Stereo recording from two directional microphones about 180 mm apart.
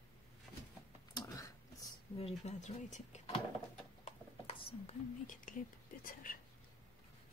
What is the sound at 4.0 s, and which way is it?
Whispering, 35° left (ahead or behind).